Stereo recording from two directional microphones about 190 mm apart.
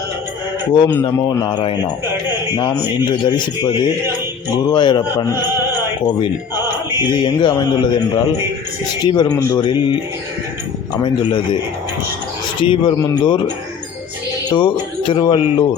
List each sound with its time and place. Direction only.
0.7 s speech: 25° left (ahead or behind)
3.0 s speech: 25° left (ahead or behind)
9.5 s speech: 20° left (ahead or behind)
11.0 s speech: 25° left (ahead or behind)
12.6 s speech: 25° left (ahead or behind)
14.5 s speech: 25° left (ahead or behind)